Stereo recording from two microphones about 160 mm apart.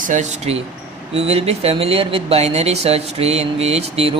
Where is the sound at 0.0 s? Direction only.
50° right (ahead or behind).